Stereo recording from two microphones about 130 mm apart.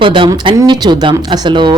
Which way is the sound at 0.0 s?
40° right (ahead or behind).